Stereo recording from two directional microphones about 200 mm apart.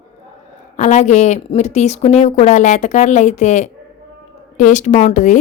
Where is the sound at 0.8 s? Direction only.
35° left (ahead or behind).